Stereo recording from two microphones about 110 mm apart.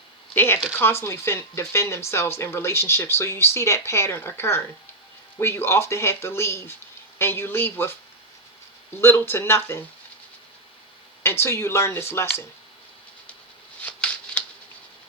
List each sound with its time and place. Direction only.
0.3 s speech: 20° left (ahead or behind)
9.0 s speech: 20° left (ahead or behind)
11.2 s speech: 20° left (ahead or behind)
13.8 s shuffling cards: 15° left (ahead or behind)